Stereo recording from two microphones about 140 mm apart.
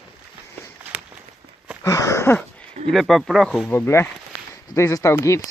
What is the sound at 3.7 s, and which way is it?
Speech, 20° left (ahead or behind).